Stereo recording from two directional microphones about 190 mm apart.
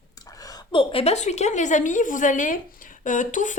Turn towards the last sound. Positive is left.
turn(degrees=40)  # may be behind; listen again after turning